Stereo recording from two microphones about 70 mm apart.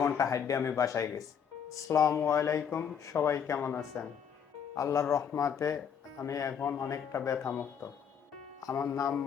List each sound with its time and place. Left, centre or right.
0.0 s a man's voice: left
6.5 s a man's voice: left
6.7 s a man's voice: left
8.6 s speech: left